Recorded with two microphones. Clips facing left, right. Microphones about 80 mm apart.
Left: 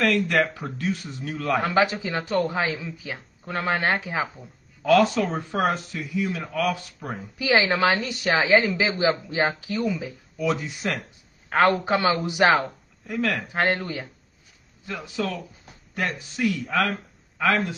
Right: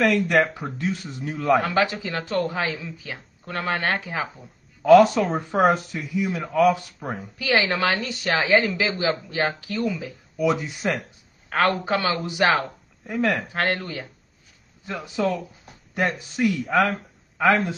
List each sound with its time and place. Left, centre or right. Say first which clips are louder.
0.0 s speech: right 2 dB; centre
1.6 s a man's voice: left 1 dB; left
4.8 s speech: right 5 dB; centre
7.3 s a woman's voice: left 1 dB; centre
10.3 s speech: right 3 dB; centre
11.4 s a woman's voice: left 2 dB; left
13.0 s speech: right 3 dB; centre
13.5 s a woman's voice: left 1 dB; centre
14.9 s speech: right 4 dB; right